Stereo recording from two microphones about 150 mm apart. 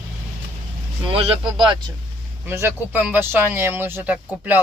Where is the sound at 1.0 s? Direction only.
40° right (ahead or behind).